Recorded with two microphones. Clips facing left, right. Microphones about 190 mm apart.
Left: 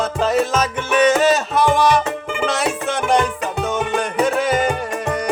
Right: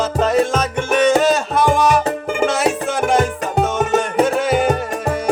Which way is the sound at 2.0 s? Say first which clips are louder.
Right 4 dB; 45° right (ahead or behind).